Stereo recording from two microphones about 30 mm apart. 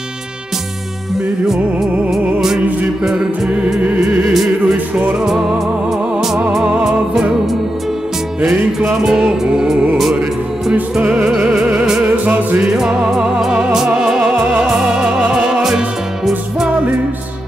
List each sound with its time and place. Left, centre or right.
1.1 s music: centre
4.2 s music: centre
4.6 s music: right
6.8 s music: centre
8.8 s music: right
10.7 s music: right
11.3 s music: centre
12.3 s music: right
12.7 s music: centre
13.5 s music: right